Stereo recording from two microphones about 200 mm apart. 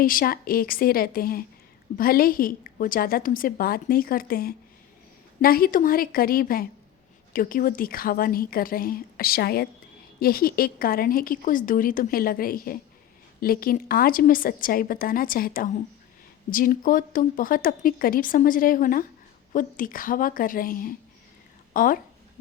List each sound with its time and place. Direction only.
0.0 s a woman's voice: 45° left (ahead or behind)